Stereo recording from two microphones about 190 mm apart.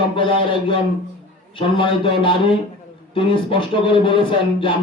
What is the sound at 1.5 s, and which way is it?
Speech, 30° left (ahead or behind).